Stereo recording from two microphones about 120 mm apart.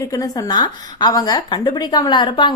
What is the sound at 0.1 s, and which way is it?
A woman's voice, 30° left (ahead or behind).